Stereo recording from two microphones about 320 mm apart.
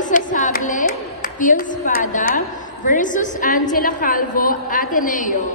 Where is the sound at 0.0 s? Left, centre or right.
Left.